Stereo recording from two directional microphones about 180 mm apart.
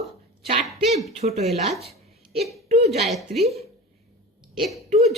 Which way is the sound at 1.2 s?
35° right (ahead or behind).